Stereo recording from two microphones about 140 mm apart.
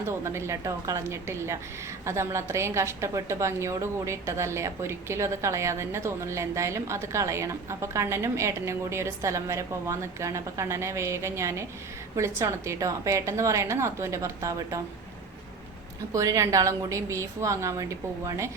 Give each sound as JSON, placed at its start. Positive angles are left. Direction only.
{"t": 0.1, "sound": "a woman's voice", "side_deg": -20}
{"t": 16.1, "sound": "a woman's voice", "side_deg": -25}